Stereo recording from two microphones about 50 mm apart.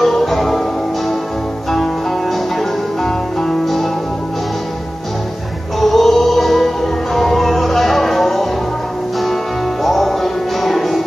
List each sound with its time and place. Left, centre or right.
0.0 s music: centre
5.8 s music: centre
9.8 s music: centre